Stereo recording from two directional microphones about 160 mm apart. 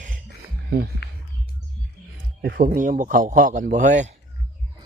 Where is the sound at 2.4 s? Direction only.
60° right (ahead or behind).